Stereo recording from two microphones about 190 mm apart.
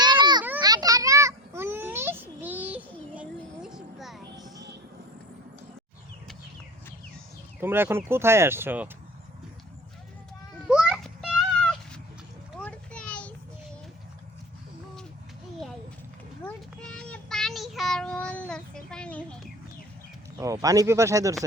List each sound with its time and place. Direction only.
0.0 s children playing: 25° right (ahead or behind)
0.6 s a sound: 20° right (ahead or behind); by 4.2 s centre (ahead or behind)
7.6 s speech: 10° right (ahead or behind)
10.7 s a sound: 5° right (ahead or behind)
16.5 s child singing: 5° left (ahead or behind)
20.4 s speech: 15° right (ahead or behind)